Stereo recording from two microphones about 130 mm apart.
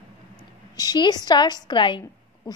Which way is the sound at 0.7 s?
30° left (ahead or behind).